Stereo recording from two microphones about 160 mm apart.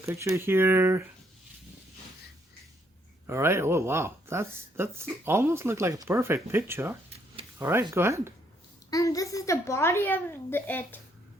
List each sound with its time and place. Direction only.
0.0 s speech: 15° right (ahead or behind)
3.2 s speech: 15° right (ahead or behind)
8.9 s a woman's voice: 20° left (ahead or behind)